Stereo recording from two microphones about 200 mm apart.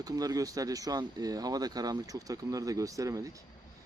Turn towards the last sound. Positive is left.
turn(degrees=-15)  # may be behind; listen again after turning